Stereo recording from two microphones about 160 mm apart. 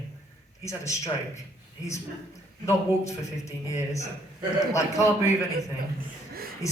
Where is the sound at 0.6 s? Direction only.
20° left (ahead or behind).